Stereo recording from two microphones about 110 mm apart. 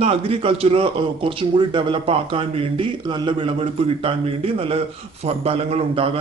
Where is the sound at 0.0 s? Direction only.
60° right (ahead or behind).